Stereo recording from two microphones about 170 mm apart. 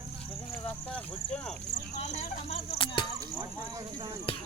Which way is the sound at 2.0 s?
40° left (ahead or behind).